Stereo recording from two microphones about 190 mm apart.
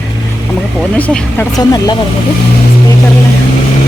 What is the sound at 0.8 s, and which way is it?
Speech, 5° left (ahead or behind).